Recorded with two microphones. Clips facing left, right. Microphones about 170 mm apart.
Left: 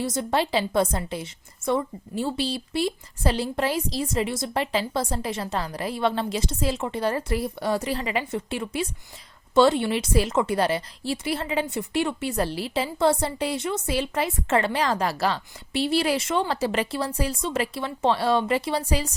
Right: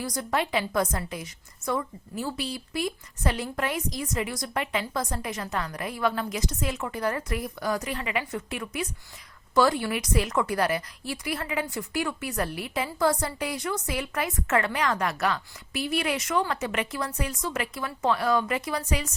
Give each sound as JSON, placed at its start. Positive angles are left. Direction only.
{"t": 0.0, "sound": "a woman's voice", "side_deg": 25}